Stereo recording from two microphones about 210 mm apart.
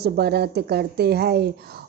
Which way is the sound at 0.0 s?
50° right (ahead or behind).